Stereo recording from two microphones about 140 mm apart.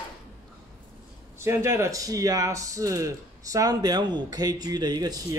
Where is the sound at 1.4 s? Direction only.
20° right (ahead or behind).